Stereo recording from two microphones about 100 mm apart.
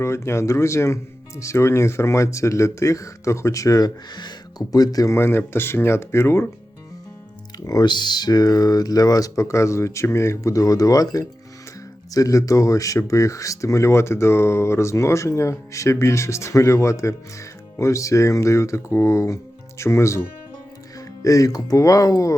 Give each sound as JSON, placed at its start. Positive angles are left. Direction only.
{"t": 0.0, "sound": "speech", "side_deg": 25}
{"t": 5.1, "sound": "speech", "side_deg": 25}
{"t": 7.6, "sound": "speech", "side_deg": 40}